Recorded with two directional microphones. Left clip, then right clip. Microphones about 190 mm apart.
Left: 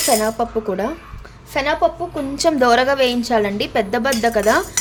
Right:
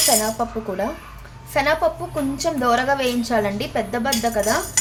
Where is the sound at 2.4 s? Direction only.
45° left (ahead or behind).